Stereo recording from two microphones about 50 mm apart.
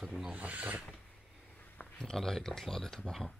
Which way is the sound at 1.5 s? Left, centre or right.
Left.